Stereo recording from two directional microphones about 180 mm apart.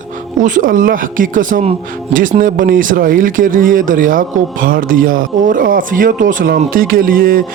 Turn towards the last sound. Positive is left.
turn(degrees=-55)  # may be behind; listen again after turning